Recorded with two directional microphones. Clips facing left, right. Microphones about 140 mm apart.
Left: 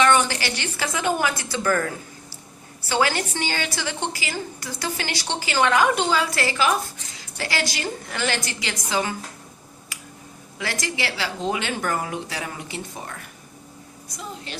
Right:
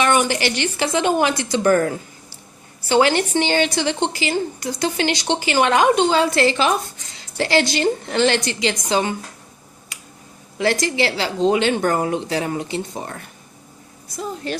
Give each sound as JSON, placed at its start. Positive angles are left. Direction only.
{"t": 0.0, "sound": "a woman's voice", "side_deg": -15}
{"t": 2.9, "sound": "a woman's voice", "side_deg": -20}
{"t": 9.9, "sound": "finger snapping", "side_deg": -25}
{"t": 10.6, "sound": "a woman's voice", "side_deg": -30}
{"t": 14.2, "sound": "speech", "side_deg": -45}